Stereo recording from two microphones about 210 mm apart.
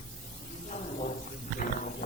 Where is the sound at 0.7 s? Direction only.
35° left (ahead or behind).